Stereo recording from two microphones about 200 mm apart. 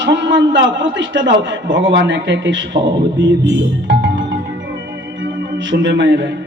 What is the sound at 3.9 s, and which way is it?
Music, 60° right (ahead or behind).